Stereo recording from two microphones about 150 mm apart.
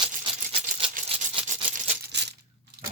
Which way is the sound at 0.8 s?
35° right (ahead or behind).